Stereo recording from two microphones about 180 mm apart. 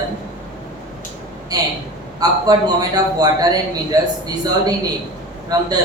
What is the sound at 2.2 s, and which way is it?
A woman's voice, 20° right (ahead or behind).